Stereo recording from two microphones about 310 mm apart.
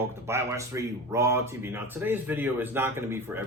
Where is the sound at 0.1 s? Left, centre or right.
Centre.